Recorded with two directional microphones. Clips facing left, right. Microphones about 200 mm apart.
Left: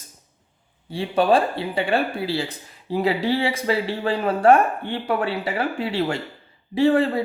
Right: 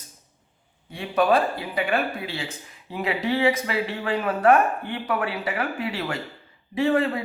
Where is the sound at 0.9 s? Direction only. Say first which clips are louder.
Left 2 dB; 30° left (ahead or behind).